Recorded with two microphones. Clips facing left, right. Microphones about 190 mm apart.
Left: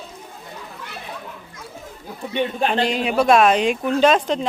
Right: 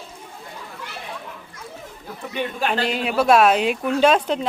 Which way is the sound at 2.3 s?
25° left (ahead or behind).